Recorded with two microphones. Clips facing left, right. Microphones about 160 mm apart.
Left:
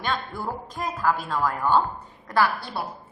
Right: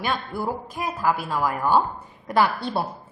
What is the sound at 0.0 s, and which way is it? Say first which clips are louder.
A woman's voice: right 2 dB; 10° right (ahead or behind).